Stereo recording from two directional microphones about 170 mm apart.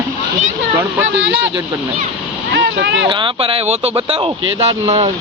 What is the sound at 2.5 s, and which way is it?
Speech, 90° right.